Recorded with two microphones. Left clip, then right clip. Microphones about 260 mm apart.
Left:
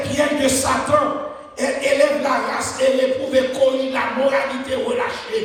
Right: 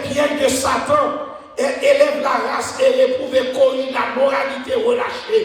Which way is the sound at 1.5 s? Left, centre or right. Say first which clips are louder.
Right 4 dB; right.